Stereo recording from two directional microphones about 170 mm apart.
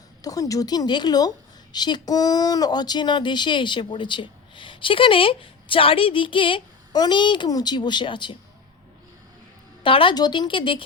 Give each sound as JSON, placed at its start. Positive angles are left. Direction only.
{"t": 0.2, "sound": "speech", "side_deg": 20}
{"t": 9.8, "sound": "speech", "side_deg": 30}